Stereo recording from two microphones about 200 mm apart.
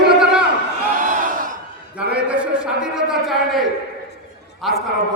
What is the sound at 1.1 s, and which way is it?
Crowd, 40° right (ahead or behind).